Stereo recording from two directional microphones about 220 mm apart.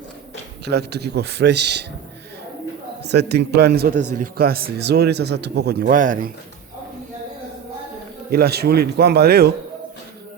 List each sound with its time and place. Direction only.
0.6 s a man's voice: 50° right (ahead or behind)
3.0 s a man's voice: 50° right (ahead or behind)
8.3 s a man's voice: 45° right (ahead or behind)